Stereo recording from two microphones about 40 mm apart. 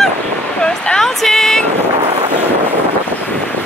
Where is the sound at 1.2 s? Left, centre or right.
Centre.